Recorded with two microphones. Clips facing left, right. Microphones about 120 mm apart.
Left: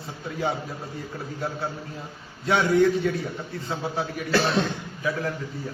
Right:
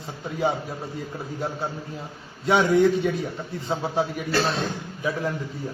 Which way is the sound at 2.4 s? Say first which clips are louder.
Right 1 dB; 15° right (ahead or behind).